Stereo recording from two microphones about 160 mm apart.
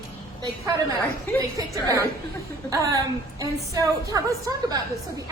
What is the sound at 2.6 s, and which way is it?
A woman's voice, 20° right (ahead or behind).